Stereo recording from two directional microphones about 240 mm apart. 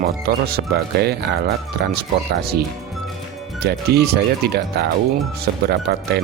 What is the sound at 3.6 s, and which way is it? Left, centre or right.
Speech, right.